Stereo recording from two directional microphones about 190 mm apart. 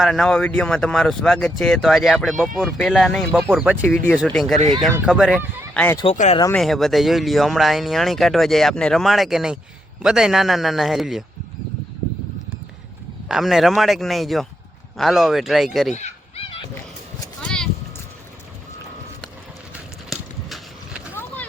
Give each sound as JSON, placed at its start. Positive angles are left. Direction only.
{"t": 0.0, "sound": "speech", "side_deg": 0}
{"t": 5.7, "sound": "speech", "side_deg": 10}
{"t": 6.1, "sound": "speech", "side_deg": 35}
{"t": 6.5, "sound": "speech", "side_deg": 0}
{"t": 13.2, "sound": "speech", "side_deg": 0}
{"t": 15.9, "sound": "a sound", "side_deg": 35}
{"t": 17.4, "sound": "a sound", "side_deg": 5}
{"t": 20.1, "sound": "horse", "side_deg": 0}